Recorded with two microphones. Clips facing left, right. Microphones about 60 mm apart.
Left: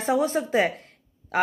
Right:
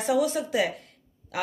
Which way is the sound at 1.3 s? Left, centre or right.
Left.